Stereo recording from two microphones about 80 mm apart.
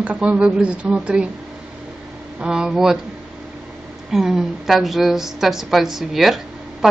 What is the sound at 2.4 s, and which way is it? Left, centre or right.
Speech, centre.